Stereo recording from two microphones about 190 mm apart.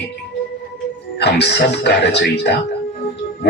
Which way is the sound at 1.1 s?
65° left (ahead or behind).